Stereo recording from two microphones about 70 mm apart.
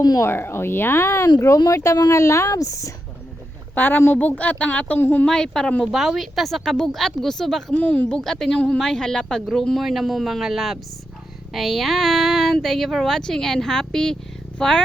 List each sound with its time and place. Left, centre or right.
0.2 s speech: left
3.8 s a woman's voice: left
5.2 s speech: centre
5.8 s speech: centre
7.7 s a woman's voice: left
8.2 s speech: centre
8.5 s speech: centre